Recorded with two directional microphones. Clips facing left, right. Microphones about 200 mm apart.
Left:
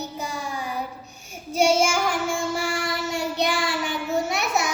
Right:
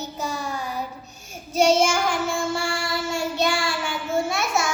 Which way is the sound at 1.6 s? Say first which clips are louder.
Right 1 dB; 10° left (ahead or behind).